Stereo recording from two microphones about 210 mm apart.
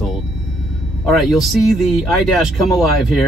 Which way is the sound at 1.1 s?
Centre (ahead or behind).